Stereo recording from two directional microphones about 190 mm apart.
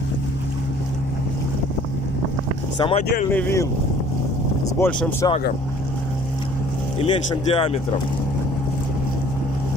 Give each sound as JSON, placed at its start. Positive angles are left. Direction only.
{"t": 2.8, "sound": "speech", "side_deg": 30}
{"t": 3.3, "sound": "speech", "side_deg": 10}
{"t": 4.7, "sound": "speech", "side_deg": 15}
{"t": 7.0, "sound": "speech", "side_deg": 30}